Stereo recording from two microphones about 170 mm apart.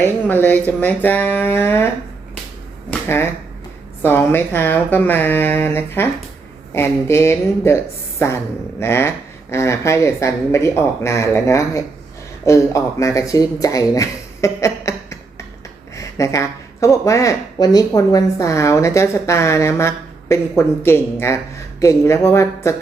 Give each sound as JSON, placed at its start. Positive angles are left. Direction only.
{"t": 0.0, "sound": "speech", "side_deg": 10}
{"t": 2.9, "sound": "speech", "side_deg": 15}